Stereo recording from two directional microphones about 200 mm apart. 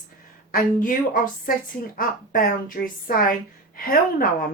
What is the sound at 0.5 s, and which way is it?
Speech, 45° left (ahead or behind).